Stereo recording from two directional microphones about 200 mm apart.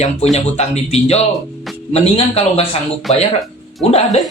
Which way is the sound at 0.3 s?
30° left (ahead or behind).